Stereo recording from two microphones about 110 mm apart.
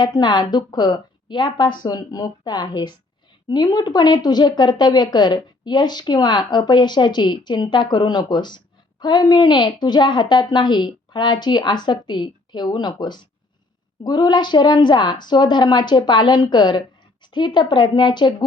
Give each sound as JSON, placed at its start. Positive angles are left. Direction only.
{"t": 0.0, "sound": "a woman's voice", "side_deg": 40}